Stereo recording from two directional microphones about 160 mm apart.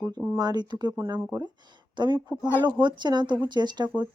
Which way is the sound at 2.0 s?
30° right (ahead or behind).